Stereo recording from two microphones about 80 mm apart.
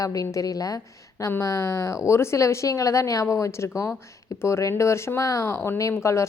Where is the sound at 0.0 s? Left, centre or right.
Left.